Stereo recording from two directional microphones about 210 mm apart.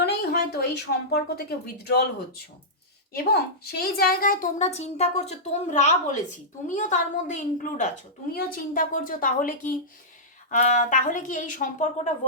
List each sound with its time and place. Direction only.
0.0 s a woman's voice: 50° left (ahead or behind)
3.1 s a woman's voice: 50° left (ahead or behind)